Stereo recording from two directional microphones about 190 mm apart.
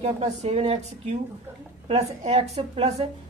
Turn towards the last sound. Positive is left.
turn(degrees=-35)  # may be behind; listen again after turning